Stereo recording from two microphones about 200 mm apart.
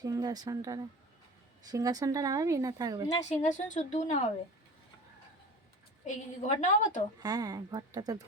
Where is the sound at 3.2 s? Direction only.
35° left (ahead or behind).